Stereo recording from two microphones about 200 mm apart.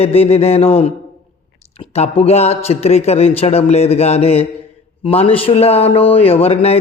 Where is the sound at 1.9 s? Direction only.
30° left (ahead or behind).